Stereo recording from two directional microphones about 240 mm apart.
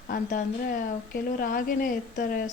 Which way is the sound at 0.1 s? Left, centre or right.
Left.